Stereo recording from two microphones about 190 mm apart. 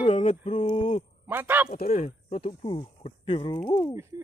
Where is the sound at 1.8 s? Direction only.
35° left (ahead or behind).